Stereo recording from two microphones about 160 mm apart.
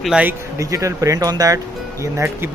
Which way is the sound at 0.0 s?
5° right (ahead or behind).